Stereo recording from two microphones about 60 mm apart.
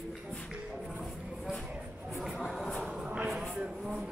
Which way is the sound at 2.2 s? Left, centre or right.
Centre.